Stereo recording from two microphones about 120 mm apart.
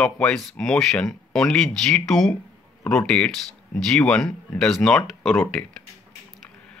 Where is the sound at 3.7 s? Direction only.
5° left (ahead or behind).